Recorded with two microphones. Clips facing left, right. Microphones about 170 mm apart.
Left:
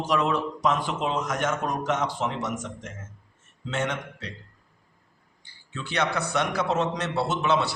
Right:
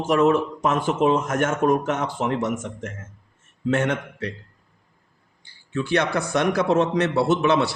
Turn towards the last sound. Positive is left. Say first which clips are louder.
# right 5 dB
turn(degrees=-60)  # may be behind; listen again after turning